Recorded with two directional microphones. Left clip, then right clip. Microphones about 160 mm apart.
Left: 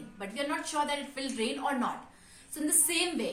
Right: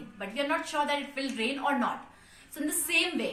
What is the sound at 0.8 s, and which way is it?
A woman's voice, 25° left (ahead or behind).